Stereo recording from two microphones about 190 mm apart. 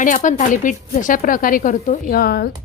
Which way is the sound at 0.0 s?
40° left (ahead or behind).